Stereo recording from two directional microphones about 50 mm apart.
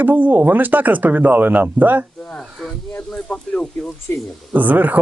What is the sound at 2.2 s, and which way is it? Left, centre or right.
Speech, centre.